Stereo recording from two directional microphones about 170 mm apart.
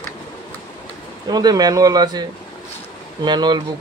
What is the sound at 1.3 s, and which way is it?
Speech, 25° right (ahead or behind).